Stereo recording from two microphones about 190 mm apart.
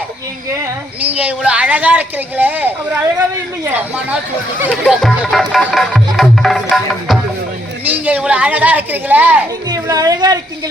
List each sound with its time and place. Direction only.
0.6 s a woman's voice: 10° right (ahead or behind)